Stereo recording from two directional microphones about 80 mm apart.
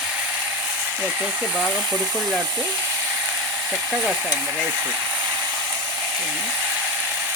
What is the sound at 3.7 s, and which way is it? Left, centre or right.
Speech, centre.